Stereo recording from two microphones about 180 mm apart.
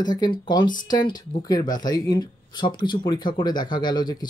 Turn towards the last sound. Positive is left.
turn(degrees=25)  # may be behind; listen again after turning